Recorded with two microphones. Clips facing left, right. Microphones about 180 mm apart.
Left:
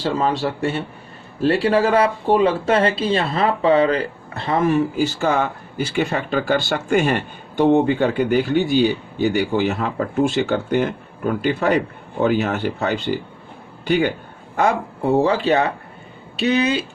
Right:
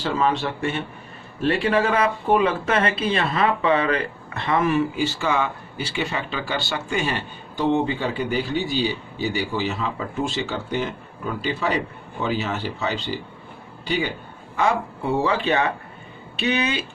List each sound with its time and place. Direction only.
0.0 s speech: 35° left (ahead or behind)